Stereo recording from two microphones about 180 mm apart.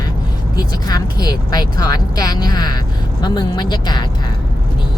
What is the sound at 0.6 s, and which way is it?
Speech, 20° left (ahead or behind).